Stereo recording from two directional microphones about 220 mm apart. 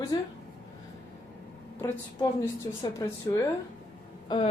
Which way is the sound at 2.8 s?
15° left (ahead or behind).